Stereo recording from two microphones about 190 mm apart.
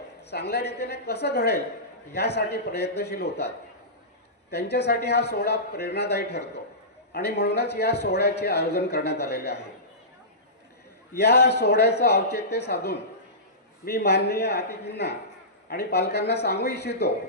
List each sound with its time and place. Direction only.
0.2 s a man's voice: 60° left (ahead or behind)
4.5 s a man's voice: 60° left (ahead or behind)
11.2 s a man's voice: 60° left (ahead or behind)